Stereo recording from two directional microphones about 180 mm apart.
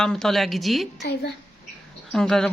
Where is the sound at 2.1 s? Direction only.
5° left (ahead or behind).